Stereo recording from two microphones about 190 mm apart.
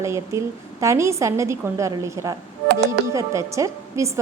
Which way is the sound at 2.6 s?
60° right (ahead or behind).